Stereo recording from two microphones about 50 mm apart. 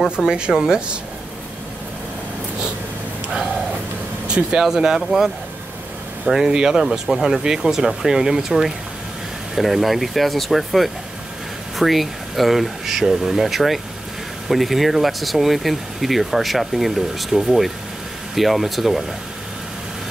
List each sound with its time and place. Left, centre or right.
0.1 s speech: centre
4.5 s speech: centre